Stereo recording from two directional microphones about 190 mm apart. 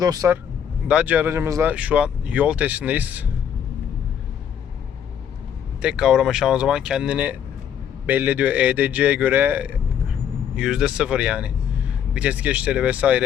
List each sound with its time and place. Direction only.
0.0 s speech: 20° right (ahead or behind)
0.9 s speech: 5° right (ahead or behind)
5.8 s speech: 5° right (ahead or behind)